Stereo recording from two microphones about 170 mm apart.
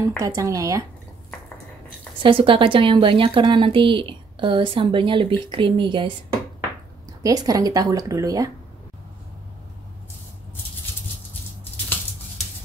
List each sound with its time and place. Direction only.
0.2 s a woman's voice: 20° right (ahead or behind)
2.2 s a woman's voice: 30° right (ahead or behind)
7.2 s a woman's voice: 20° right (ahead or behind)